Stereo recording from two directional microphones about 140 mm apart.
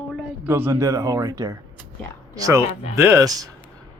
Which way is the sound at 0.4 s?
15° right (ahead or behind).